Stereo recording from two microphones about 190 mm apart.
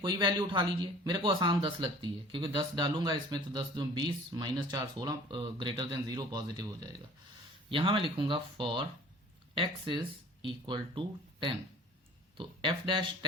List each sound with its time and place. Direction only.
0.0 s speech: 25° right (ahead or behind)